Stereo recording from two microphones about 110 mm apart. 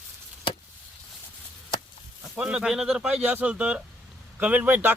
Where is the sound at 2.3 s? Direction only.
10° right (ahead or behind).